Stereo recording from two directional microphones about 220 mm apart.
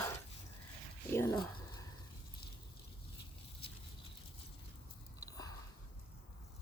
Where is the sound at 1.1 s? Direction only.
10° left (ahead or behind).